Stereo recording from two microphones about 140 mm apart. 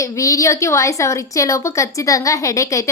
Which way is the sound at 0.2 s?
25° left (ahead or behind).